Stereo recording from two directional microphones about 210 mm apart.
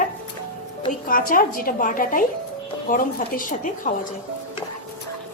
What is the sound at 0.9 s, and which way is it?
A woman's voice, 40° left (ahead or behind).